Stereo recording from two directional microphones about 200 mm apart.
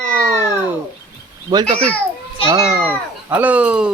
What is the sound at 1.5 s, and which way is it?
A child's voice, 20° right (ahead or behind).